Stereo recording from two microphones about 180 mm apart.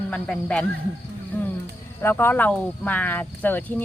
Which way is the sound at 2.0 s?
10° left (ahead or behind).